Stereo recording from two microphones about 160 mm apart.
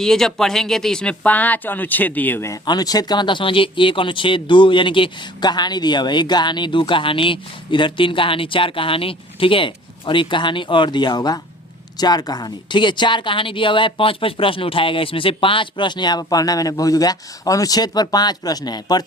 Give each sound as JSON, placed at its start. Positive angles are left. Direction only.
{"t": 0.0, "sound": "speech", "side_deg": 5}